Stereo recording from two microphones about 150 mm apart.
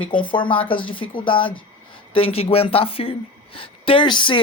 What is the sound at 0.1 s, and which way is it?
Speech, 35° left (ahead or behind).